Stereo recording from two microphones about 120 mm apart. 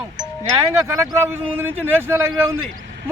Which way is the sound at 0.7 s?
20° right (ahead or behind).